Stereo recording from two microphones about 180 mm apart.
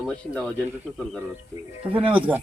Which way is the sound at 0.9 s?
Centre (ahead or behind).